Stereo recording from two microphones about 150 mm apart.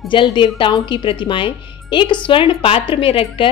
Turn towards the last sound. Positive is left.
turn(degrees=35)  # may be behind; listen again after turning